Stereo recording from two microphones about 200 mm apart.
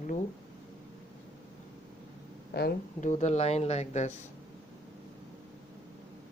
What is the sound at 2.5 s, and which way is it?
Speech, 55° left (ahead or behind).